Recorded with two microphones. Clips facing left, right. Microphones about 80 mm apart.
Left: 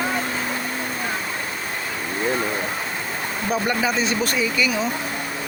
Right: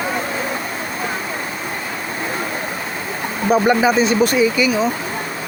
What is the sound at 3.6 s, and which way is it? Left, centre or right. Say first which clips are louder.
Speech: right 7 dB; centre.